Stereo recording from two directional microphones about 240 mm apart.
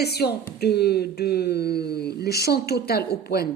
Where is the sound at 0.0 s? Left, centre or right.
Left.